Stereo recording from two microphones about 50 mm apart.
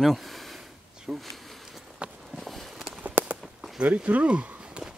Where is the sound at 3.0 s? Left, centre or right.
Right.